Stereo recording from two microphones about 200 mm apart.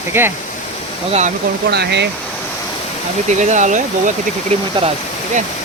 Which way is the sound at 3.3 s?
35° right (ahead or behind).